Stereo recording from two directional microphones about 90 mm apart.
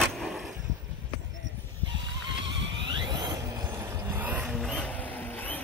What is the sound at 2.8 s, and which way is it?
Squeal, 60° right (ahead or behind).